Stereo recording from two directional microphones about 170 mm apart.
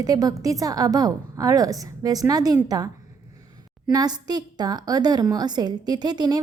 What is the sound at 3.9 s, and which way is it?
A woman's voice, 25° right (ahead or behind).